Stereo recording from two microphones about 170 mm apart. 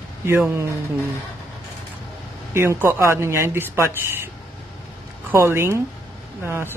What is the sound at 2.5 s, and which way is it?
Speech, 15° right (ahead or behind).